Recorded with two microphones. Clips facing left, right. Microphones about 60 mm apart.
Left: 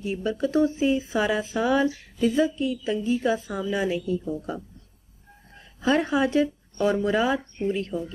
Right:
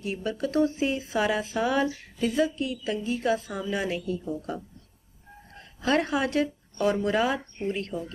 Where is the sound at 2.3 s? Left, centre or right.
Left.